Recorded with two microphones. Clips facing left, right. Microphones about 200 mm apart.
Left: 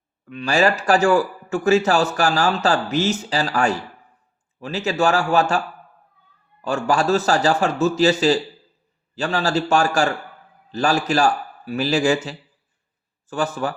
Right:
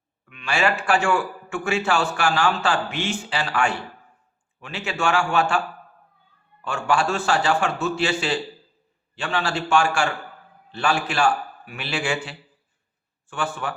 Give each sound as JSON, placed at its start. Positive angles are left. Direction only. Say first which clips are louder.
{"t": 0.3, "sound": "a man's voice", "louder": "left 5 dB", "side_deg": 35}